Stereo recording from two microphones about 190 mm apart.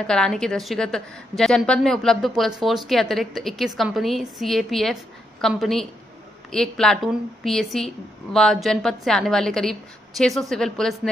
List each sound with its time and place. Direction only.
0.0 s a woman's voice: 5° left (ahead or behind)